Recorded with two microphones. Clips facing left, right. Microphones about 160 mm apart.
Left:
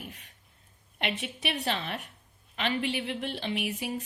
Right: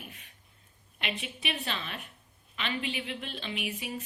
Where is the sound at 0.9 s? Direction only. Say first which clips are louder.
Left 4 dB; 70° left (ahead or behind).